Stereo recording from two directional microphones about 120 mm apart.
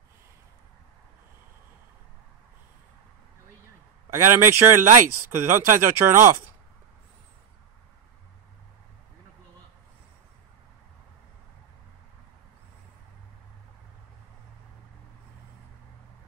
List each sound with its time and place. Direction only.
4.1 s speech: 20° right (ahead or behind)